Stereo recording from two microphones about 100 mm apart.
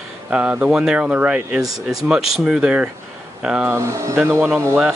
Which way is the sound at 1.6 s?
35° right (ahead or behind).